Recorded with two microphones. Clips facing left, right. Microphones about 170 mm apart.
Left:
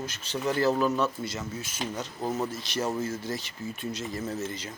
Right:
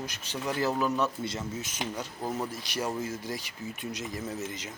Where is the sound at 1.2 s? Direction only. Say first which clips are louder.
Even; 25° right (ahead or behind).